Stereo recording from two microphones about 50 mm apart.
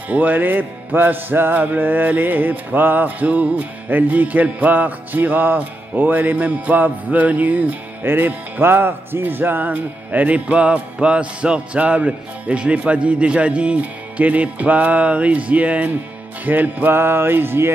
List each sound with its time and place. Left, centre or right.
0.1 s music: right
6.3 s music: right
8.0 s speech: right
16.4 s music: right
16.9 s music: right